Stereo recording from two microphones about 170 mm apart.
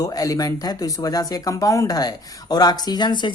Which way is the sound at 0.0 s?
20° left (ahead or behind).